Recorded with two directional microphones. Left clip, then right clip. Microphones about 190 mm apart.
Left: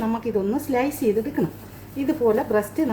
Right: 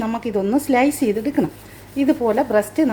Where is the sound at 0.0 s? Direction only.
50° right (ahead or behind).